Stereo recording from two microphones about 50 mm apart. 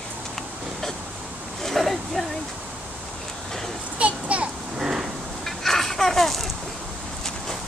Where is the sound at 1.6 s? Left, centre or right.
Centre.